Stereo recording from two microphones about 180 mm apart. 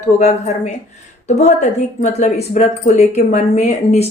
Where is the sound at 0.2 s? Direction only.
40° left (ahead or behind).